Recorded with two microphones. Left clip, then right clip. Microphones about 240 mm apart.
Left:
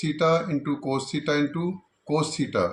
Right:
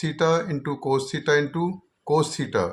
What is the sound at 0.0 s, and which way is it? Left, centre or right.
Speech, right.